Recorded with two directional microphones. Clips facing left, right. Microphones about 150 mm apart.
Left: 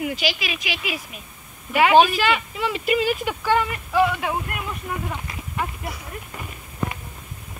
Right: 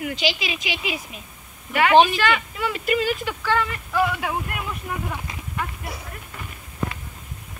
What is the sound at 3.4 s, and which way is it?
Speech, 20° left (ahead or behind).